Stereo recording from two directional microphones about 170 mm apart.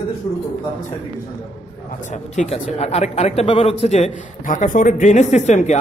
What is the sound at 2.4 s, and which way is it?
A man's voice, 45° left (ahead or behind).